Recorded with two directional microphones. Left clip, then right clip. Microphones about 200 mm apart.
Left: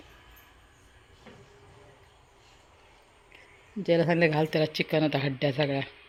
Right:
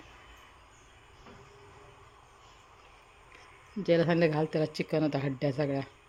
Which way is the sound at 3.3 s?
5° left (ahead or behind).